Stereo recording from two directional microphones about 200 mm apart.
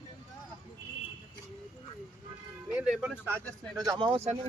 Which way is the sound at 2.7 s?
5° right (ahead or behind).